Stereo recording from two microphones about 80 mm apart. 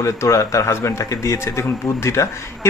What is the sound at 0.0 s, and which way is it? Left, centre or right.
Speech, left.